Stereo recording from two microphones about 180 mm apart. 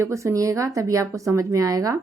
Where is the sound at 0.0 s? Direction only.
15° right (ahead or behind).